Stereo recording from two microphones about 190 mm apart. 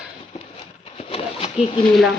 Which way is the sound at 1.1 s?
30° left (ahead or behind).